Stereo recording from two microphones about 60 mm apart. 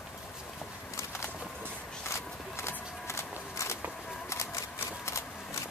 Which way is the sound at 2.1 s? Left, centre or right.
Left.